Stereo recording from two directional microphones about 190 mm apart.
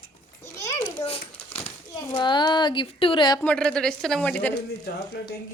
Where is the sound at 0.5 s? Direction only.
15° left (ahead or behind).